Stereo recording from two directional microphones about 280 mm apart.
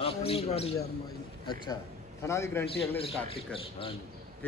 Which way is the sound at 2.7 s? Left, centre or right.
Centre.